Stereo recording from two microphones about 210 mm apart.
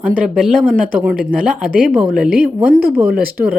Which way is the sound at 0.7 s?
40° right (ahead or behind).